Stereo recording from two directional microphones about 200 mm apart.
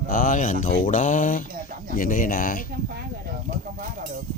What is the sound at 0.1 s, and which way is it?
Speech, 45° left (ahead or behind).